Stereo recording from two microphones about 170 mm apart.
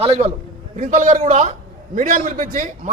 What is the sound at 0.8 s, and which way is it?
A man's voice, 50° right (ahead or behind).